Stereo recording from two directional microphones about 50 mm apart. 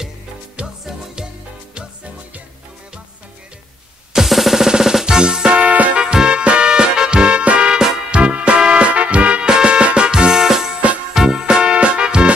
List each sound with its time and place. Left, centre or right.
0.8 s music: centre
4.1 s music: centre
5.6 s music: right
5.9 s music: centre